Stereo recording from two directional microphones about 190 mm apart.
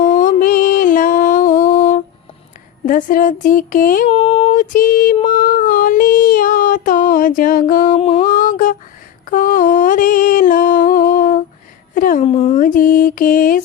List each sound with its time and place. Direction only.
0.0 s music: 45° left (ahead or behind)
2.8 s child singing: 45° left (ahead or behind)
4.1 s child singing: 30° left (ahead or behind)
7.9 s female singing: 30° left (ahead or behind)
8.3 s female singing: 45° left (ahead or behind)
9.2 s a sound: 45° left (ahead or behind)
12.2 s child singing: 30° left (ahead or behind)